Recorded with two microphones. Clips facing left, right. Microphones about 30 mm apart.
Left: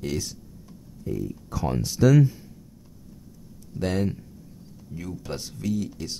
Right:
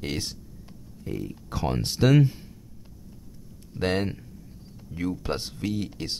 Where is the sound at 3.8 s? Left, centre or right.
Right.